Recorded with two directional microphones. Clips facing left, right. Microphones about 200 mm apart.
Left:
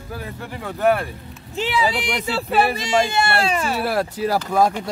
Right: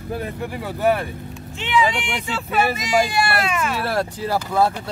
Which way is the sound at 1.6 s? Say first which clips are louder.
Right 1 dB; 35° left (ahead or behind).